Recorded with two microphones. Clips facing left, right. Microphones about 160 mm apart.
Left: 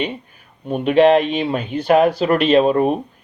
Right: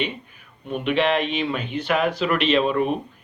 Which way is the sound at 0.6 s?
40° left (ahead or behind).